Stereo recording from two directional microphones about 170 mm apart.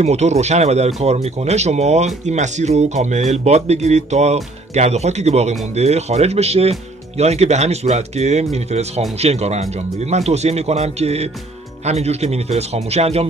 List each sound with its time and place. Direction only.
0.0 s speech: 40° right (ahead or behind)